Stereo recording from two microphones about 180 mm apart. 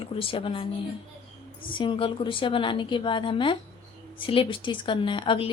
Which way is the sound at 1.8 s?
30° left (ahead or behind).